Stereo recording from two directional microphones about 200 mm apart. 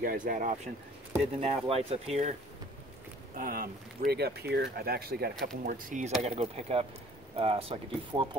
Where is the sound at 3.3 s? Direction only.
45° right (ahead or behind).